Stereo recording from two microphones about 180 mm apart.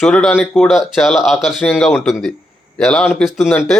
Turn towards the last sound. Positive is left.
turn(degrees=0)  # may be behind; listen again after turning